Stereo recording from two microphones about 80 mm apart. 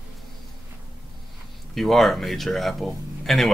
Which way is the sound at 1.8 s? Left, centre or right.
Centre.